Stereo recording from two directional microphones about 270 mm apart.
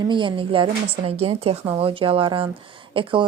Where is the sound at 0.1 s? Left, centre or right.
Centre.